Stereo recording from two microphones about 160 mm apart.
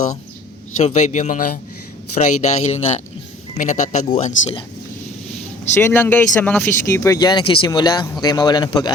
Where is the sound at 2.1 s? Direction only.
45° left (ahead or behind).